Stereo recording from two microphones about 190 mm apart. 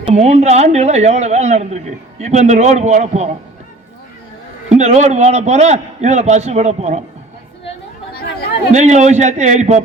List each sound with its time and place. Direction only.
0.0 s a woman's voice: 35° right (ahead or behind)
4.8 s a woman's voice: 35° right (ahead or behind)
8.1 s chatter: 55° left (ahead or behind)
8.7 s a woman's voice: 40° right (ahead or behind)